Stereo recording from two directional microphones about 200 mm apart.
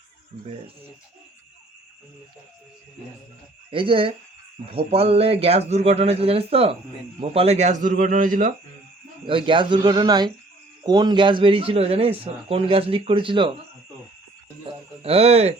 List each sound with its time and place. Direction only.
3.7 s a man's voice: 25° right (ahead or behind); by 8.5 s 40° right (ahead or behind)
9.2 s a man's voice: 25° right (ahead or behind)
14.7 s speech: 30° right (ahead or behind)